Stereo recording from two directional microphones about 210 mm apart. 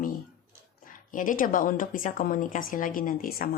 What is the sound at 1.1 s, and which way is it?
A woman's voice, 40° left (ahead or behind).